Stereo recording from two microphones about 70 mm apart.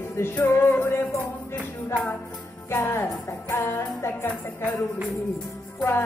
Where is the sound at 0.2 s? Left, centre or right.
Left.